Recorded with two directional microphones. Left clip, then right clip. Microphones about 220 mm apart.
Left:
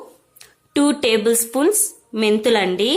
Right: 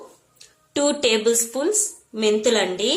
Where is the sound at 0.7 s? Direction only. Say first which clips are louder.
Left 2 dB; 30° left (ahead or behind).